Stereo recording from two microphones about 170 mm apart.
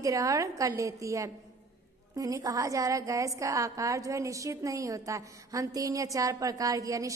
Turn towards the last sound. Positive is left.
turn(degrees=-20)  # may be behind; listen again after turning